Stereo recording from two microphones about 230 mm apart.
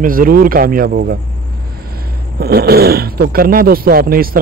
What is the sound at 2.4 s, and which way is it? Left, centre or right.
Speech, right.